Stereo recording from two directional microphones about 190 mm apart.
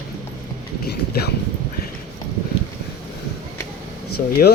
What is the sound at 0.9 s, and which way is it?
Speech, 60° left (ahead or behind).